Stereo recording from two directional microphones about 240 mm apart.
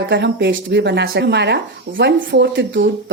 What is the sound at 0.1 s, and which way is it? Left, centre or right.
Speech, right.